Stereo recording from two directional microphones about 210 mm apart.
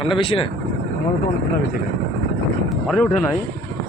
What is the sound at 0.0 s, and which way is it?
Speech, 25° left (ahead or behind).